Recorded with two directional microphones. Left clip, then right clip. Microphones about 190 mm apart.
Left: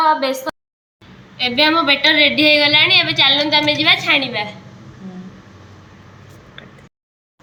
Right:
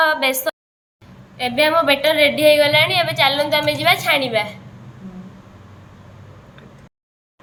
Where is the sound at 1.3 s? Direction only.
65° right (ahead or behind).